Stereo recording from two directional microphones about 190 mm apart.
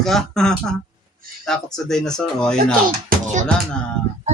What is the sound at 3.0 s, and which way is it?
Music, 40° right (ahead or behind).